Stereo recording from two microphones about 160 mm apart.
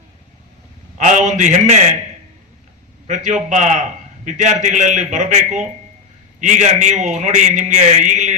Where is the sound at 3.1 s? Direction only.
50° right (ahead or behind).